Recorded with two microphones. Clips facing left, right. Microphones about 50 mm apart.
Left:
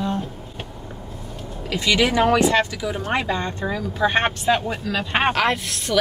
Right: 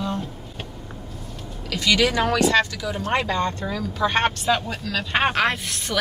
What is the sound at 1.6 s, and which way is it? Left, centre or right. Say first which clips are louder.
Speech: left 1 dB; left.